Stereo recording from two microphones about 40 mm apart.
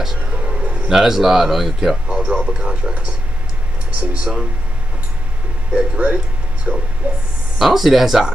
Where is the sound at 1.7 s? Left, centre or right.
Centre.